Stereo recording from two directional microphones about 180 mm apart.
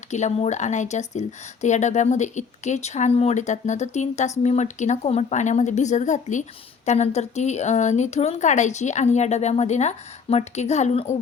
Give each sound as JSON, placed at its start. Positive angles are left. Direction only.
{"t": 0.1, "sound": "speech", "side_deg": 40}